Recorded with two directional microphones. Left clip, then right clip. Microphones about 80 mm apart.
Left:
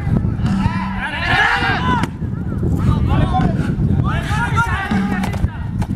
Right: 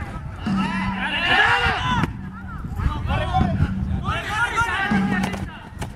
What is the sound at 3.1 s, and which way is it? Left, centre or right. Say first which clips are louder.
Vehicle: left 2 dB; right.